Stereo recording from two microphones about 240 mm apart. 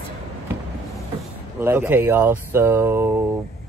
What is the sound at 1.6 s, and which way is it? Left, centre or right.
Speech, centre.